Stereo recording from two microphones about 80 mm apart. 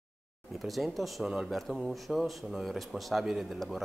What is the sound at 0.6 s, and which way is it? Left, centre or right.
Speech, centre.